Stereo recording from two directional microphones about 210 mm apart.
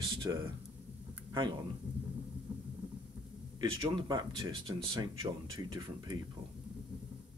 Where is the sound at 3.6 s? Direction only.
25° right (ahead or behind).